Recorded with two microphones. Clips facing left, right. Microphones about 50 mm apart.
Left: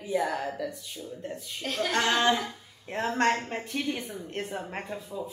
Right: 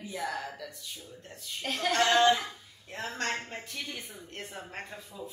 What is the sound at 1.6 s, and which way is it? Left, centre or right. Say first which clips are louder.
Speech: left 3 dB; centre.